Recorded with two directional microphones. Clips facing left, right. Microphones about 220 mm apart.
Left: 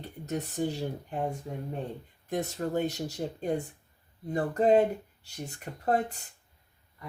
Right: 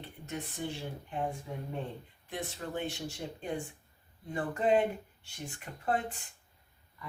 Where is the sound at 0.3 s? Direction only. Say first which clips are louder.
Left 7 dB; 40° left (ahead or behind).